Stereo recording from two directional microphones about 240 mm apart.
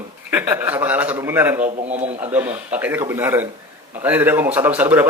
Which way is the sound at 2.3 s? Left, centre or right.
Centre.